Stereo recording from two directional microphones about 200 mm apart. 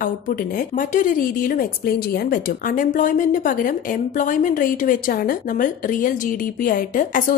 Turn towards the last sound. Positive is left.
turn(degrees=40)  # may be behind; listen again after turning